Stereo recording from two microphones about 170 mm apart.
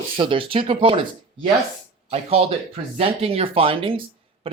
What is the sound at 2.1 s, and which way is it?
Speech, 35° right (ahead or behind).